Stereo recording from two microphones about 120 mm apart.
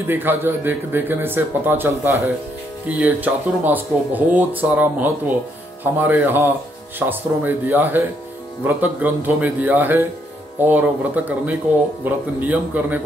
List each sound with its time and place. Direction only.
0.1 s speech: 15° right (ahead or behind)